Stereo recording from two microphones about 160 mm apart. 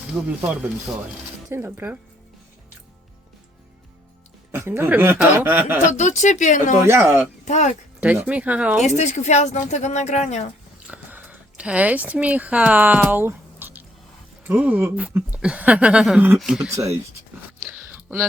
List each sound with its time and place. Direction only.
0.1 s speech: 10° right (ahead or behind)
4.5 s speech: 15° right (ahead or behind)
5.9 s speech: 50° left (ahead or behind)
6.8 s speech: 15° right (ahead or behind)
7.4 s speech: 45° left (ahead or behind)
8.0 s speech: 10° right (ahead or behind)
9.0 s speech: 45° left (ahead or behind)
10.8 s speech: 10° right (ahead or behind)
16.7 s speech: 15° right (ahead or behind)
17.7 s a sound: centre (ahead or behind)